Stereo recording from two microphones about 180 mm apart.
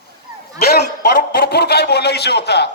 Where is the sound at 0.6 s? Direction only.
60° left (ahead or behind).